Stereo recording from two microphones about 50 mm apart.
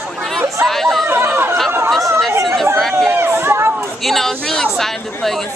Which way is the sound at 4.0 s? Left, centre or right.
Centre.